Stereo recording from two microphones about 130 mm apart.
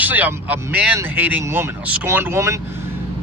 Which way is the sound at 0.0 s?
15° right (ahead or behind).